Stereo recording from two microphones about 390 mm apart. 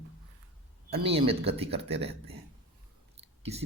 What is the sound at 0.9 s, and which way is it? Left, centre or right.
Speech, centre.